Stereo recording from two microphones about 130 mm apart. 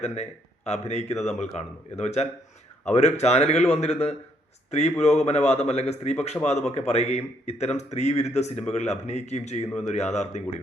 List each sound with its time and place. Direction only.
0.0 s speech: 55° left (ahead or behind)